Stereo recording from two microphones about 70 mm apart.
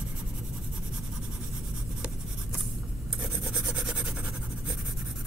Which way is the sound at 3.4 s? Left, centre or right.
Centre.